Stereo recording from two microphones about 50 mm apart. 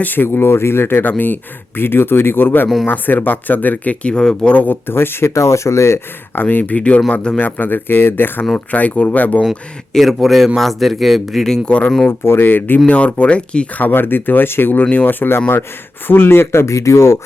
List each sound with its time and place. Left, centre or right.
0.0 s speech: left
0.3 s speech: left
4.0 s speech: centre
4.5 s speech: left
5.3 s speech: left
6.3 s speech: left
7.4 s speech: left
8.5 s speech: left
9.5 s speech: centre
11.6 s speech: left
12.2 s speech: left
12.9 s speech: left
13.7 s speech: left